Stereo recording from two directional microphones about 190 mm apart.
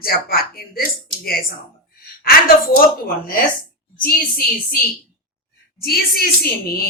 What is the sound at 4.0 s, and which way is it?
Speech, 50° left (ahead or behind).